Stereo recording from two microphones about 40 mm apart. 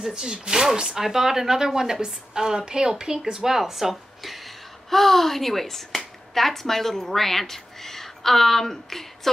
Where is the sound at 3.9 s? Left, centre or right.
Centre.